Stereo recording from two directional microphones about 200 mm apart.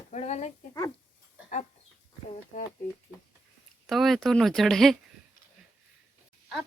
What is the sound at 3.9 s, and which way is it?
Speech, centre (ahead or behind).